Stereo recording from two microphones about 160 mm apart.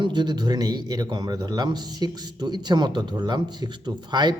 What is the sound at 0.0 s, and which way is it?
Speech, 25° right (ahead or behind).